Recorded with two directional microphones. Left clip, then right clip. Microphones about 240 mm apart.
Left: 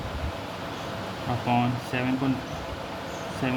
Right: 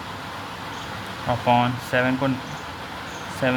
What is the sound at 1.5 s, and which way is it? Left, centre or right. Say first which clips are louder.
Speech: right 7 dB; right.